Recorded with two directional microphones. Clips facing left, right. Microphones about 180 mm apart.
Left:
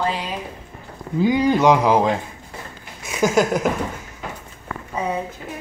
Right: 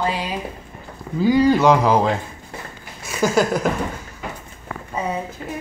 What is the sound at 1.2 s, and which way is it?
Speech, 15° left (ahead or behind).